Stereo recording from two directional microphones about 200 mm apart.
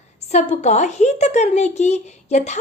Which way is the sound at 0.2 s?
35° left (ahead or behind).